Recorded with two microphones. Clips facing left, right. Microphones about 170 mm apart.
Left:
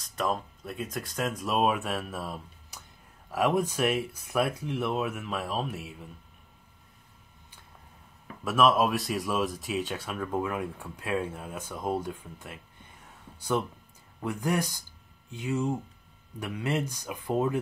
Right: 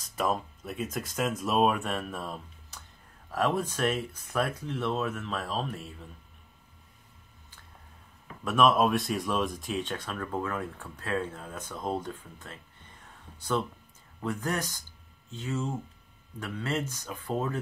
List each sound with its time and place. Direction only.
0.1 s speech: 5° right (ahead or behind)
8.5 s speech: centre (ahead or behind)